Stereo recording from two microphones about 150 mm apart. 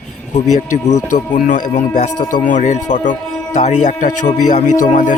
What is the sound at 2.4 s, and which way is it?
Music, 55° left (ahead or behind).